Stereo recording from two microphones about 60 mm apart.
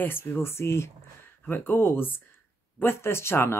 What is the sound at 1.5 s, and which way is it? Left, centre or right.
Speech, left.